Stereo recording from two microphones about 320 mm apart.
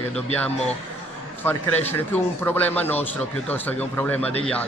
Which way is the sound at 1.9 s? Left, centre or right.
Centre.